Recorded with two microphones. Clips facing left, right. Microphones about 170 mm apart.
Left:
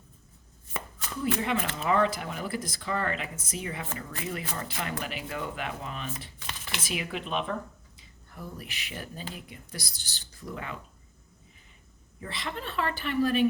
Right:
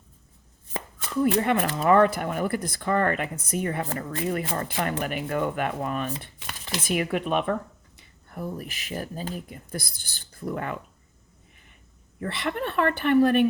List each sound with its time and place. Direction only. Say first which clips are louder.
1.2 s speech: right 7 dB; 55° right (ahead or behind)
12.2 s speech: right 8 dB; 60° right (ahead or behind)